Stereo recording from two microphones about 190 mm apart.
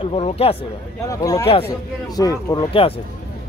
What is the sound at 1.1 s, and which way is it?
Speech, 20° left (ahead or behind).